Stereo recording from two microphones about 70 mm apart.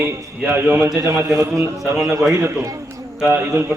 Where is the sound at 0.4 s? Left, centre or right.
Right.